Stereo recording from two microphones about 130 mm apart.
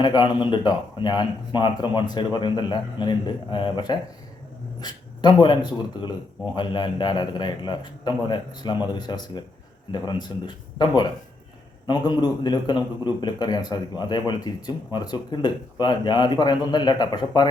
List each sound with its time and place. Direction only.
0.0 s speech: 35° left (ahead or behind)